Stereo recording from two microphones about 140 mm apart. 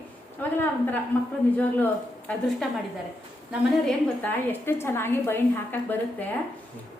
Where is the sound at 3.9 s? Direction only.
15° left (ahead or behind).